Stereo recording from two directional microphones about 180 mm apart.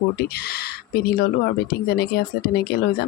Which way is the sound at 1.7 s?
60° left (ahead or behind).